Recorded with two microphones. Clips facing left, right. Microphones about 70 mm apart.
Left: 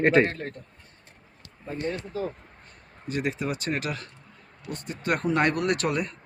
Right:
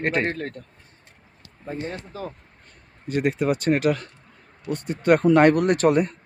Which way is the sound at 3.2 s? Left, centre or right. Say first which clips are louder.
Right 7 dB; right.